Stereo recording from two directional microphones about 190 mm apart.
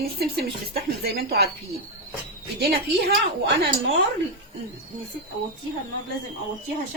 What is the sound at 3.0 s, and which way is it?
Speech, 55° right (ahead or behind).